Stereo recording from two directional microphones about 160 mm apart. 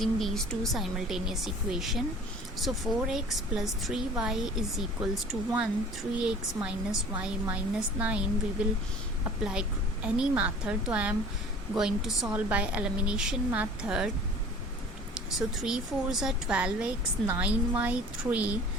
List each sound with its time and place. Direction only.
0.0 s a woman's voice: centre (ahead or behind)
9.4 s a woman's voice: 5° right (ahead or behind)
15.1 s a woman's voice: 5° right (ahead or behind)